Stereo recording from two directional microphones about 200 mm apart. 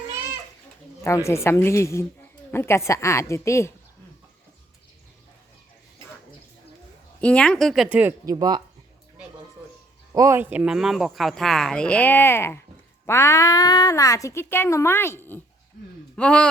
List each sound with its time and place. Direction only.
1.0 s speech: 15° left (ahead or behind)
7.2 s speech: 5° left (ahead or behind); by 8.6 s 20° right (ahead or behind)
10.1 s speech: 15° right (ahead or behind); by 16.5 s 5° left (ahead or behind)